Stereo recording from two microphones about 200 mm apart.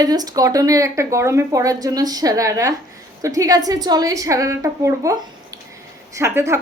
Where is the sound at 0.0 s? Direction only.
20° right (ahead or behind).